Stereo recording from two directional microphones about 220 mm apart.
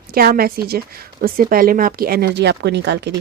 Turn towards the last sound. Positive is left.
turn(degrees=-50)  # may be behind; listen again after turning